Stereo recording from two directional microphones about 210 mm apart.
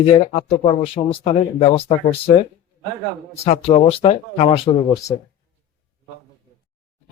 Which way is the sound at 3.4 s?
30° left (ahead or behind).